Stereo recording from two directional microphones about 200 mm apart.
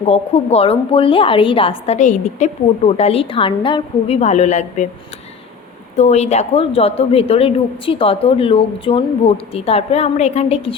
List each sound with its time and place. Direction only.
0.0 s a woman's voice: 30° left (ahead or behind)
6.0 s a woman's voice: 35° left (ahead or behind)